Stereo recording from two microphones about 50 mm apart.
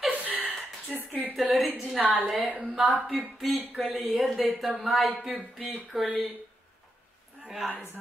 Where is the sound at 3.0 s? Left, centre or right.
Centre.